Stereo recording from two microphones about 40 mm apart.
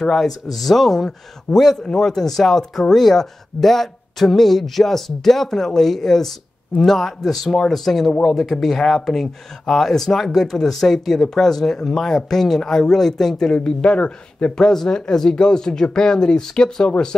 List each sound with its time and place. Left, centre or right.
0.0 s a man's voice: centre
13.5 s speech: left
14.6 s speech: centre